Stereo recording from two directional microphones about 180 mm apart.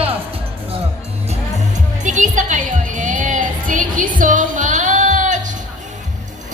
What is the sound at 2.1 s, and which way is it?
Music, 45° right (ahead or behind).